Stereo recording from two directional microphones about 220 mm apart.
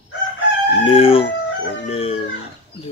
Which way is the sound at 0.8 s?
25° left (ahead or behind).